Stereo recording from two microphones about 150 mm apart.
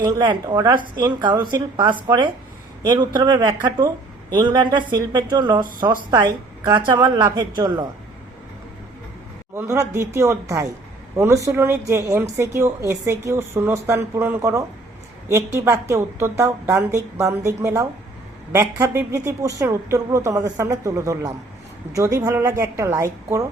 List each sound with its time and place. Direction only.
0.0 s a woman's voice: 25° right (ahead or behind)
9.6 s a woman's voice: 20° right (ahead or behind)